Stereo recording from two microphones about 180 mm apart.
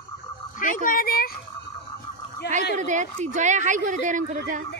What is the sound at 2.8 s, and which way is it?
A woman's voice, 40° right (ahead or behind).